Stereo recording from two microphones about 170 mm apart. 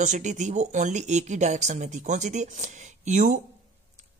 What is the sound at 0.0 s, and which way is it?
Speech, 45° right (ahead or behind).